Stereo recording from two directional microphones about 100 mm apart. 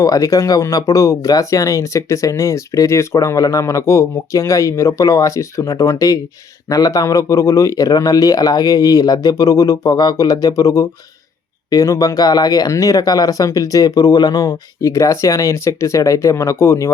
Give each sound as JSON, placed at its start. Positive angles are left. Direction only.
{"t": 0.0, "sound": "speech", "side_deg": 35}